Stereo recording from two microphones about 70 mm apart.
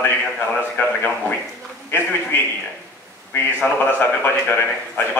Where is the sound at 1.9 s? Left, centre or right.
Left.